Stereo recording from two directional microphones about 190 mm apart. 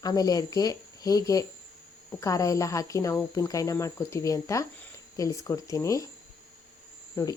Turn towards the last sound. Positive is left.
turn(degrees=15)  # may be behind; listen again after turning